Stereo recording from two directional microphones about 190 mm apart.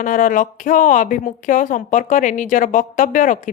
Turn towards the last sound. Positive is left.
turn(degrees=45)  # may be behind; listen again after turning